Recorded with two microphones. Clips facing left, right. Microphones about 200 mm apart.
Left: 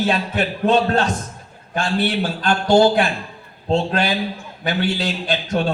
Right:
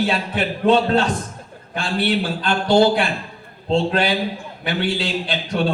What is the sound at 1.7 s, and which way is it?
A man's voice, 45° left (ahead or behind).